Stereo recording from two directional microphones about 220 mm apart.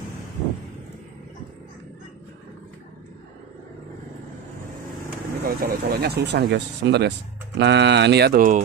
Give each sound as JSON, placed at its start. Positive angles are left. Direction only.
{"t": 5.4, "sound": "speech", "side_deg": -40}